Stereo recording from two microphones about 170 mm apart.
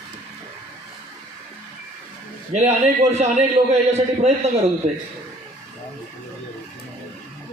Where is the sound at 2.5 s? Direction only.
40° right (ahead or behind).